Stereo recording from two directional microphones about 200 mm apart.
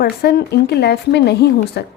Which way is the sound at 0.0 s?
55° left (ahead or behind).